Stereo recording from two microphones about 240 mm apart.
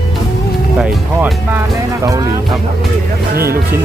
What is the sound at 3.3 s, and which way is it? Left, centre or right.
Speech, right.